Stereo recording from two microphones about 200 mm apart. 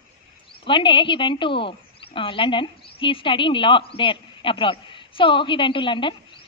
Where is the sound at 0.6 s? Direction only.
25° left (ahead or behind).